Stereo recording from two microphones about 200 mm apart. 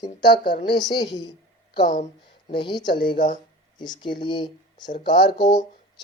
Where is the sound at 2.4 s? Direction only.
25° left (ahead or behind).